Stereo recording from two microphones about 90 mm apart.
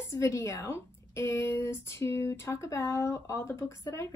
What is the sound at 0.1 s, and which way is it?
A woman's voice, 30° left (ahead or behind).